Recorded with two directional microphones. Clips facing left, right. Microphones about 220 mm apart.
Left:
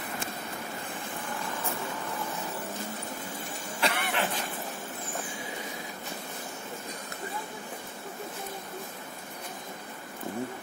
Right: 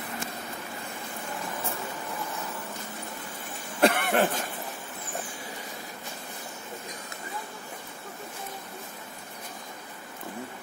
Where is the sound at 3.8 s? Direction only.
50° right (ahead or behind).